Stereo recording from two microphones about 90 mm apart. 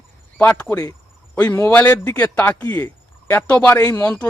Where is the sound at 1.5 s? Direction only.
25° left (ahead or behind).